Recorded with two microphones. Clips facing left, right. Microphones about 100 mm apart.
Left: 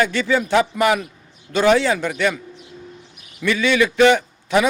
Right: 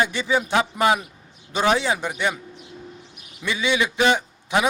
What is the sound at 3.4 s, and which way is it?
A man's voice, 20° right (ahead or behind).